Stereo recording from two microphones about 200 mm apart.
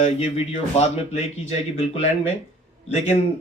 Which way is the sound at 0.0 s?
30° left (ahead or behind).